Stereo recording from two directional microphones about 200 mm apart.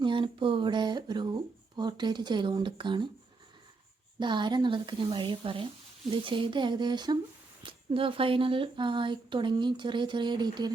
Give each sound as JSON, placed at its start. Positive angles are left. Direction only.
{"t": 0.0, "sound": "speech", "side_deg": -25}
{"t": 4.2, "sound": "speech", "side_deg": -25}